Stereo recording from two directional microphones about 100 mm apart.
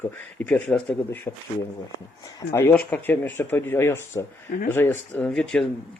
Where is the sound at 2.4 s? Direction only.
30° left (ahead or behind).